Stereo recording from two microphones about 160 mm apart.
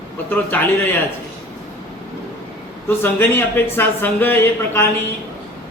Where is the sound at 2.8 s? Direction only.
15° left (ahead or behind).